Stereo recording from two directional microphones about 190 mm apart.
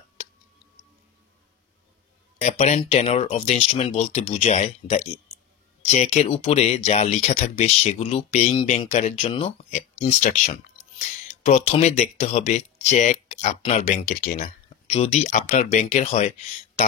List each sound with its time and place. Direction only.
2.3 s speech: 35° left (ahead or behind)